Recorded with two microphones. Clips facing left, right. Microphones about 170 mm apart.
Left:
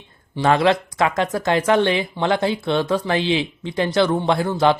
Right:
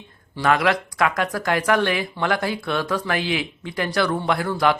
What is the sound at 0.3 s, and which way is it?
Speech, 25° left (ahead or behind).